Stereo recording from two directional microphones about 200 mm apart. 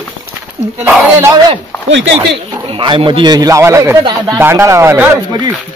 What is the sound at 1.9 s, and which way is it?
Speech, 65° right (ahead or behind).